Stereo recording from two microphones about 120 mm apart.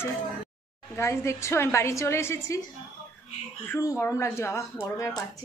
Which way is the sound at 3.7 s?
25° left (ahead or behind).